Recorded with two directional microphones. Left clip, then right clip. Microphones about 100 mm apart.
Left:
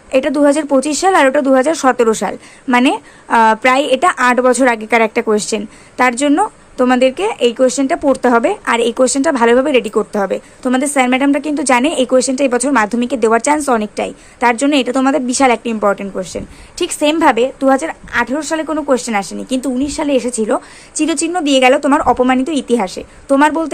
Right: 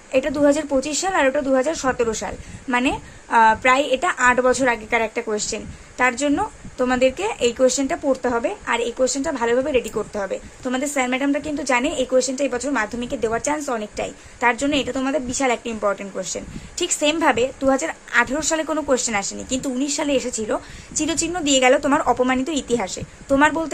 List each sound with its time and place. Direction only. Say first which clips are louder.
0.1 s a woman's voice: left 6 dB; 35° left (ahead or behind)
2.6 s a woman's voice: left 8 dB; 30° left (ahead or behind)
8.0 s a woman's voice: left 10 dB; 45° left (ahead or behind)
9.0 s a woman's voice: left 9 dB; 55° left (ahead or behind)
13.7 s a woman's voice: left 9 dB; 35° left (ahead or behind)
14.9 s a woman's voice: left 9 dB; 45° left (ahead or behind)
15.4 s a woman's voice: left 8 dB; 30° left (ahead or behind)
17.8 s a woman's voice: left 3 dB; 15° left (ahead or behind)
18.9 s speech: left 8 dB; 25° left (ahead or behind)